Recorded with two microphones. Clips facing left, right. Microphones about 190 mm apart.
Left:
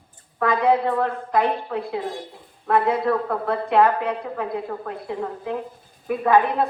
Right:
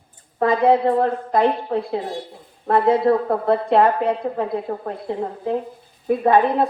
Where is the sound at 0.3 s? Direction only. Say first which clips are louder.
Right 3 dB; 30° right (ahead or behind).